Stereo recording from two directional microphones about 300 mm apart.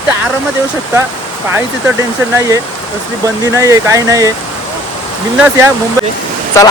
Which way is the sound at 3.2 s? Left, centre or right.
Centre.